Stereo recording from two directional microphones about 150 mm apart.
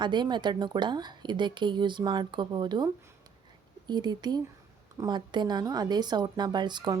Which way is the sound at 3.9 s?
30° right (ahead or behind).